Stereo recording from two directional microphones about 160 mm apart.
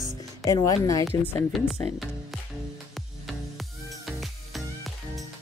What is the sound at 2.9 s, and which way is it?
Music, centre (ahead or behind).